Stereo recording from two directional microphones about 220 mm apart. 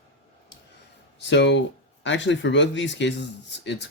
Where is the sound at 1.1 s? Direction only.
55° left (ahead or behind).